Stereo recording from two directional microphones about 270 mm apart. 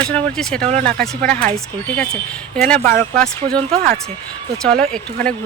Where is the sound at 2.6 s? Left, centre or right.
Centre.